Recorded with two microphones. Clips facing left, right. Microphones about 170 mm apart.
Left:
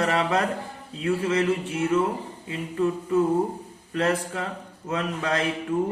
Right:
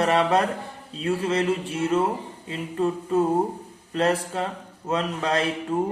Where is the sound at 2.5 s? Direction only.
25° right (ahead or behind).